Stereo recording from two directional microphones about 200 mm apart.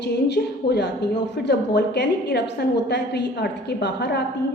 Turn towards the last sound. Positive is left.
turn(degrees=55)  # may be behind; listen again after turning